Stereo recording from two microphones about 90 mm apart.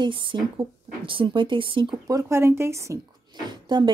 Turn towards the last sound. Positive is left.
turn(degrees=-55)  # may be behind; listen again after turning